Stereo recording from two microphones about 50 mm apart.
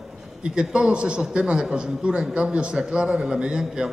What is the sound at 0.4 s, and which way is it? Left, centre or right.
A man's voice, centre.